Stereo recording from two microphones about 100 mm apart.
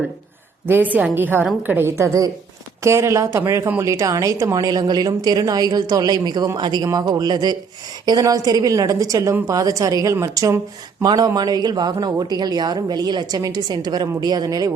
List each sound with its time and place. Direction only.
0.9 s a woman's voice: 15° right (ahead or behind)
11.0 s a woman's voice: 40° right (ahead or behind)